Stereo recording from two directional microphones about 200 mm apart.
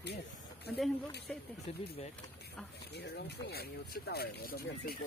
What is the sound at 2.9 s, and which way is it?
Speech, 55° left (ahead or behind).